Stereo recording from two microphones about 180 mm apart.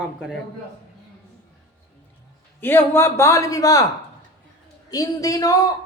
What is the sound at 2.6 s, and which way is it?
Speech, 10° left (ahead or behind).